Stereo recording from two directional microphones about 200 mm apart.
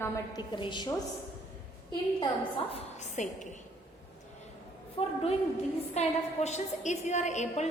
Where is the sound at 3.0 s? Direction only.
35° left (ahead or behind).